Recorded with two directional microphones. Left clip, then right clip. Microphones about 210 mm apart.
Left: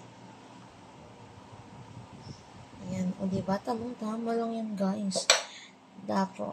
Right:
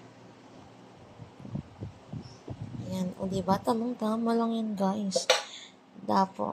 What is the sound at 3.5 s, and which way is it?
Speech, 30° right (ahead or behind).